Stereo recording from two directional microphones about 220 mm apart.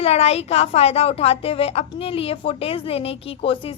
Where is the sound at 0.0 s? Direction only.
30° left (ahead or behind).